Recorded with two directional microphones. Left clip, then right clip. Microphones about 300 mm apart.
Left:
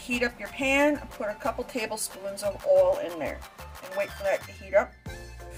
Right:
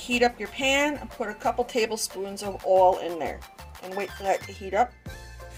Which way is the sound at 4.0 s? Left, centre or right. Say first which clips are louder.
Right 1 dB; right.